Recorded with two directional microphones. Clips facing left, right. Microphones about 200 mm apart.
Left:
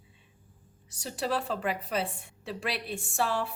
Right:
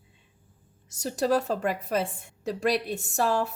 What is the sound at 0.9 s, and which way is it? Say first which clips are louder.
A woman's voice: right 7 dB; 45° right (ahead or behind).